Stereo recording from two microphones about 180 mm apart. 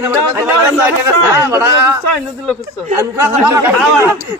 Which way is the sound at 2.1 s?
5° left (ahead or behind).